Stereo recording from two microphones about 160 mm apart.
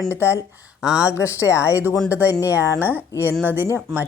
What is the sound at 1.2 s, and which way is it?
Speech, 20° left (ahead or behind).